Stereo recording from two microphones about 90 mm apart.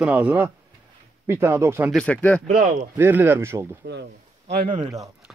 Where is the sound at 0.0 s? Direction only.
15° right (ahead or behind).